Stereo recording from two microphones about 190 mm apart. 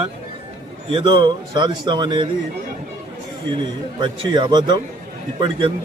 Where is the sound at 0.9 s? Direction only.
25° right (ahead or behind).